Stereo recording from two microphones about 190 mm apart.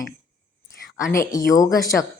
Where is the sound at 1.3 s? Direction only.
20° left (ahead or behind).